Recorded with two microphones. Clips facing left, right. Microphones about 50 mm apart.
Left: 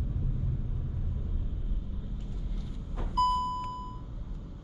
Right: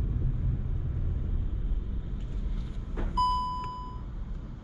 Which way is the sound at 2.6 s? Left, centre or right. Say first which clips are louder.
Right 4 dB; centre.